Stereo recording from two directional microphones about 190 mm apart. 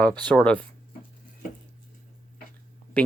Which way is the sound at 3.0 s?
5° left (ahead or behind).